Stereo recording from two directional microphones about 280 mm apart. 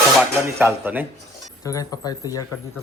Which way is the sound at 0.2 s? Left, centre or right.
Centre.